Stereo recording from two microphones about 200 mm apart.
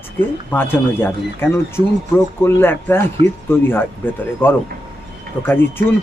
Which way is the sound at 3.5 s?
10° left (ahead or behind).